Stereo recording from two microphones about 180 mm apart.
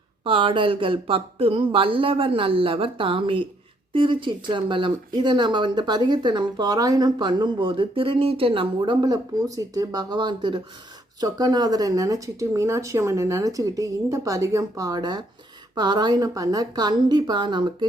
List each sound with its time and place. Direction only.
0.3 s speech: 30° right (ahead or behind)